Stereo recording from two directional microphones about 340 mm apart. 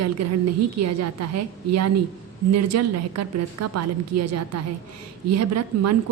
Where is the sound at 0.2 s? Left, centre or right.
Right.